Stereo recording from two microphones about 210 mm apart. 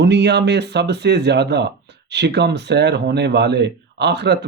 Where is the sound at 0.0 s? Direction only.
55° right (ahead or behind).